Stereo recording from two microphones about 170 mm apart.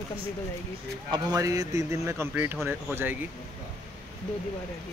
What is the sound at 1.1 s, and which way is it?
A man's voice, 20° right (ahead or behind).